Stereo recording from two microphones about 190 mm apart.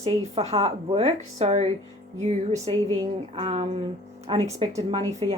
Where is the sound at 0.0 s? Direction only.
35° right (ahead or behind).